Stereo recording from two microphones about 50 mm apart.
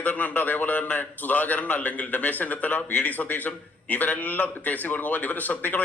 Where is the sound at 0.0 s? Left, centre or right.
Left.